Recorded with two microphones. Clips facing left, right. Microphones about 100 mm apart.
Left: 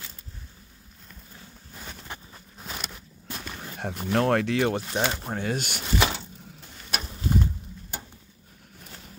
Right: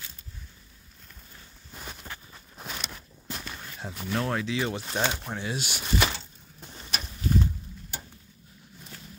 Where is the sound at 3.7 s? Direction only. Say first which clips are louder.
Left 10 dB; 55° left (ahead or behind).